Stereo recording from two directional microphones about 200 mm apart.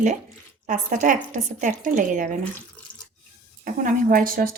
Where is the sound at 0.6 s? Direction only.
40° right (ahead or behind).